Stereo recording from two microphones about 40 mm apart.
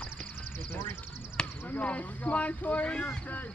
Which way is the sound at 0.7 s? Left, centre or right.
Left.